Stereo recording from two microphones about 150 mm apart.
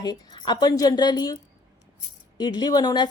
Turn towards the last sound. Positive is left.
turn(degrees=25)  # may be behind; listen again after turning